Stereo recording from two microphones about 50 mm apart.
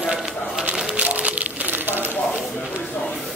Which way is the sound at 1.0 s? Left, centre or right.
Right.